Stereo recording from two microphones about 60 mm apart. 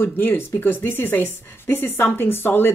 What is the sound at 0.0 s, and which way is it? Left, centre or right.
A woman's voice, left.